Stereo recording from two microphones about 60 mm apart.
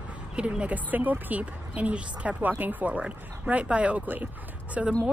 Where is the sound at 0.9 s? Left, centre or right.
Right.